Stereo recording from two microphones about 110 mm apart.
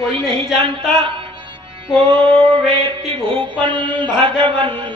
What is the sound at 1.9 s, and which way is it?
Mantra, 50° right (ahead or behind).